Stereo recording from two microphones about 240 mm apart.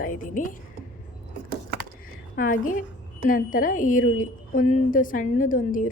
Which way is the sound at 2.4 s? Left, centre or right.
Left.